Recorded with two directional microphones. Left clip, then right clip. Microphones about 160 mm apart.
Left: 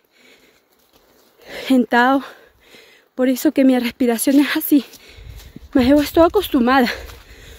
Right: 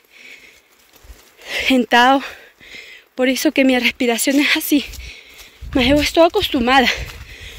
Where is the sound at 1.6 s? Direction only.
30° left (ahead or behind).